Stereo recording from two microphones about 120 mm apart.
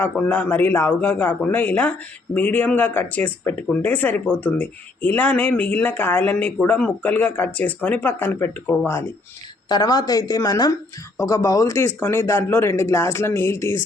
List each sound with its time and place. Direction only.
0.0 s speech: 15° left (ahead or behind)
9.6 s a woman's voice: 35° left (ahead or behind)